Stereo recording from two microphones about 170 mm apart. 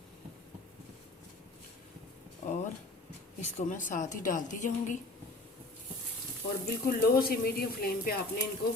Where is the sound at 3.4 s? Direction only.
50° left (ahead or behind).